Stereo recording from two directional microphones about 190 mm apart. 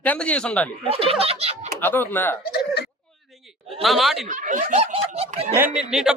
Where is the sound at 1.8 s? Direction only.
10° left (ahead or behind).